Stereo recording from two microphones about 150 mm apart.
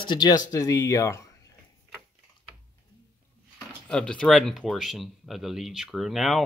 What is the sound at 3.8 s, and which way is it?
Speech, 5° left (ahead or behind).